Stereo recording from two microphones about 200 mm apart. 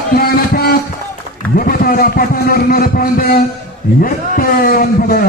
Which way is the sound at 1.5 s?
45° left (ahead or behind).